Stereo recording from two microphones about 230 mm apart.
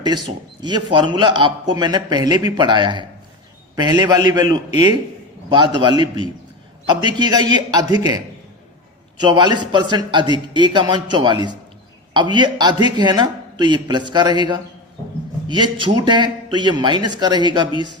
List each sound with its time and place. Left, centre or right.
0.6 s a man's voice: centre